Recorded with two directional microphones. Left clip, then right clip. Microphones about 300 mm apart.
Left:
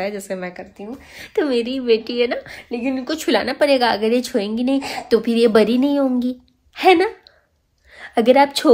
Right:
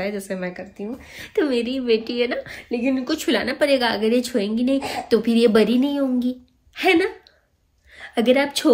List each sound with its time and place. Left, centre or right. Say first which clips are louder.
0.0 s a woman's voice: left 2 dB; centre